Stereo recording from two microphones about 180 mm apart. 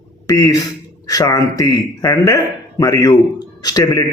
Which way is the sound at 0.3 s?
20° left (ahead or behind).